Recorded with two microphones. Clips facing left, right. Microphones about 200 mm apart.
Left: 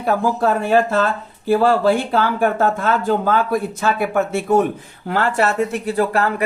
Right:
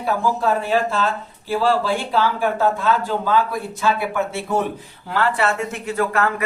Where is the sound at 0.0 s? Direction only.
50° left (ahead or behind).